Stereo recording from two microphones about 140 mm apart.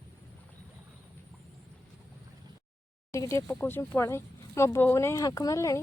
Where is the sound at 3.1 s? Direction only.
20° left (ahead or behind).